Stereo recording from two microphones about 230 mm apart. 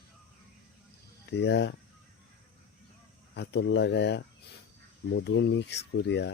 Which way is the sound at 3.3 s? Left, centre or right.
Left.